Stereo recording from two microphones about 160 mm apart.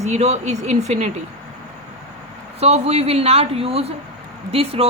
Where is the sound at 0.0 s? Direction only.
45° right (ahead or behind).